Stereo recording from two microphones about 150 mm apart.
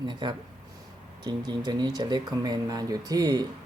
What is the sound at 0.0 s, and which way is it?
Speech, 30° right (ahead or behind).